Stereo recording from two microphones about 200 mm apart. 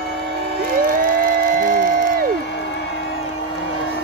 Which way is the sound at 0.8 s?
45° right (ahead or behind).